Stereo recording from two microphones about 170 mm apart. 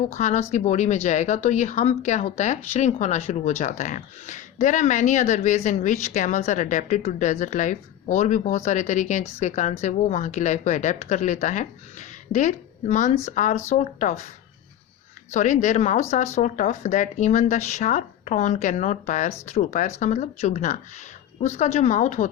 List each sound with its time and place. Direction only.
0.1 s speech: 40° left (ahead or behind)
15.3 s speech: 45° left (ahead or behind)